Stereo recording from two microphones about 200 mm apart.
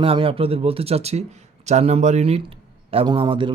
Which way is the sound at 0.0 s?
25° right (ahead or behind).